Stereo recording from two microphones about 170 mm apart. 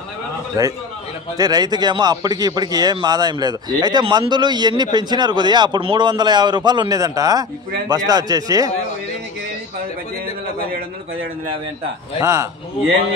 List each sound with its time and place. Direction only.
0.6 s a man's voice: 20° right (ahead or behind)
12.2 s speech: 15° right (ahead or behind)